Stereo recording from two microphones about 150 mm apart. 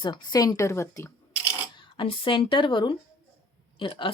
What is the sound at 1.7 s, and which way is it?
A woman's voice, 35° left (ahead or behind).